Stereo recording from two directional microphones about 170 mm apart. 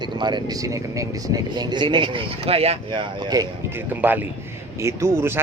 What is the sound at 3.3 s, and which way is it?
Speech, 20° right (ahead or behind).